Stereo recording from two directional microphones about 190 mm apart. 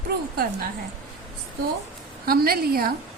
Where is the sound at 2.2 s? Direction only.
50° right (ahead or behind).